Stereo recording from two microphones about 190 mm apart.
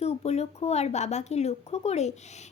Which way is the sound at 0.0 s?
35° left (ahead or behind).